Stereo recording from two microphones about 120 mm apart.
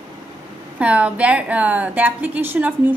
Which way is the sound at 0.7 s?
10° right (ahead or behind).